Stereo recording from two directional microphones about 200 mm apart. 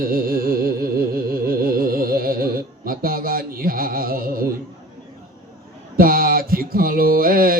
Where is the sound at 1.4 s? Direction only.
45° right (ahead or behind).